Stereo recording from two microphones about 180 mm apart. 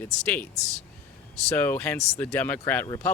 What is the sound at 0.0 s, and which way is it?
Speech, 10° left (ahead or behind).